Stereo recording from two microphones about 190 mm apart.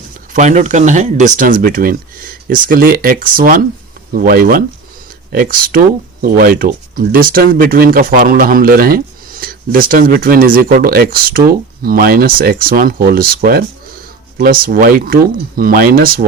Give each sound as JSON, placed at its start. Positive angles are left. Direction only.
{"t": 0.3, "sound": "speech", "side_deg": -40}